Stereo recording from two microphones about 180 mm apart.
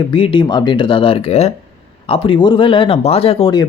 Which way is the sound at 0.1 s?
30° left (ahead or behind).